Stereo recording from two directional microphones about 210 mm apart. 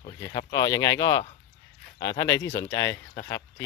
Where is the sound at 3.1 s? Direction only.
15° left (ahead or behind).